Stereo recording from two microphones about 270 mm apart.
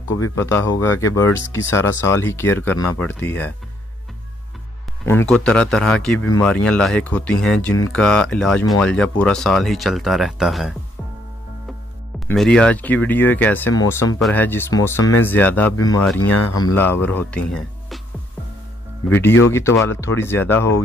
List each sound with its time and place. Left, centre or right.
0.2 s speech: centre
5.0 s speech: centre
12.3 s speech: centre
16.3 s speech: left
16.7 s speech: centre
19.0 s speech: centre